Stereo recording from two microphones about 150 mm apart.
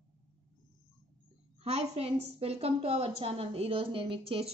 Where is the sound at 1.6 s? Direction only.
45° right (ahead or behind).